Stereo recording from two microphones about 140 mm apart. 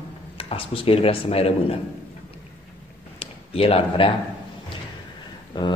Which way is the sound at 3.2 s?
45° left (ahead or behind).